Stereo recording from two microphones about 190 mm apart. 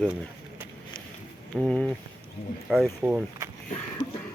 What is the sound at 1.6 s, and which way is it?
Speech, 5° left (ahead or behind).